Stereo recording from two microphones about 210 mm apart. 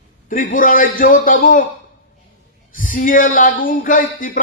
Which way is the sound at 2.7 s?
40° left (ahead or behind).